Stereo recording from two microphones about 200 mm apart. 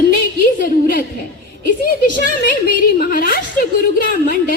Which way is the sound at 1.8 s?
45° left (ahead or behind).